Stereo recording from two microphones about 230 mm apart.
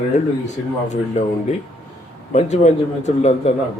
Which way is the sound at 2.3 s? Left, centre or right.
Left.